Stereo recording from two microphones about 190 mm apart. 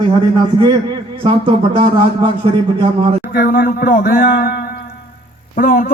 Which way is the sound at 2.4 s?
30° right (ahead or behind).